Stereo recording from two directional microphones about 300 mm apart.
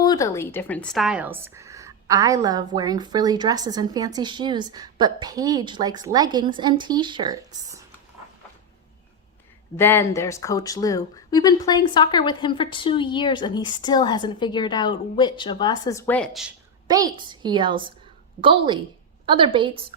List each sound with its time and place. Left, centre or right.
0.0 s a woman's voice: centre
9.7 s speech: centre
16.9 s a woman's voice: centre